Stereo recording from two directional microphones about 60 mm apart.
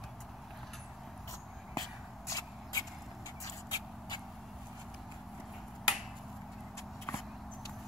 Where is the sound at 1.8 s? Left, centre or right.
Left.